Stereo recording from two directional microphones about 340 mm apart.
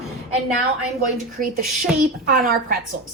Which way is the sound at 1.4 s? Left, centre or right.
Right.